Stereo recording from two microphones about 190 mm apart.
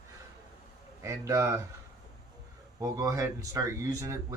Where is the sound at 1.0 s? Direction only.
15° right (ahead or behind).